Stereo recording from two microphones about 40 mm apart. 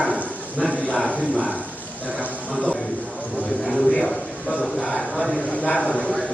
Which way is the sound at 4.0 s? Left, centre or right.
Centre.